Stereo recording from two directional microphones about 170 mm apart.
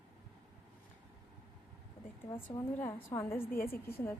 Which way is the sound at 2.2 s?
25° left (ahead or behind).